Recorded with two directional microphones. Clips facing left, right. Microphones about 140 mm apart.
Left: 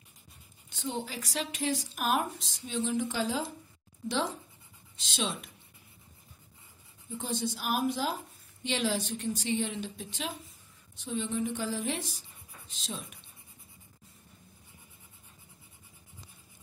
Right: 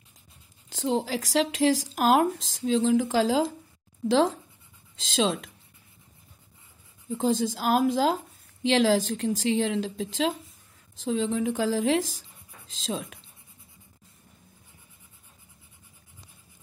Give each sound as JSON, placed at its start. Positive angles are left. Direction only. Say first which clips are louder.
{"t": 0.7, "sound": "speech", "louder": "right 9 dB", "side_deg": -90}
{"t": 7.1, "sound": "speech", "louder": "right 9 dB", "side_deg": -90}